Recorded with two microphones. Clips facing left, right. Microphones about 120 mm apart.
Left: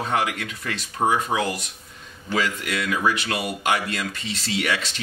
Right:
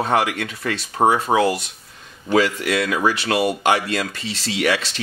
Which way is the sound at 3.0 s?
35° right (ahead or behind).